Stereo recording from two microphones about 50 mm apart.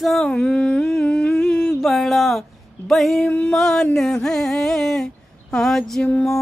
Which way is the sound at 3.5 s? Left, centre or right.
Centre.